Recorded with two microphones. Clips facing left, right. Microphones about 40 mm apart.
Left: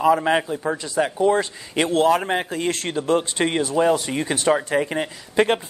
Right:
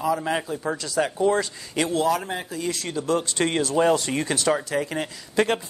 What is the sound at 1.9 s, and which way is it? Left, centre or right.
Speech, left.